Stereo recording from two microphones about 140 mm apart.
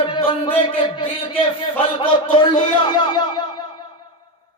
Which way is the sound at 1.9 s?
35° left (ahead or behind).